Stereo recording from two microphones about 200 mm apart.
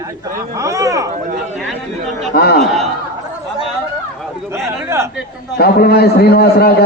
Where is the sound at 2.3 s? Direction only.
50° left (ahead or behind).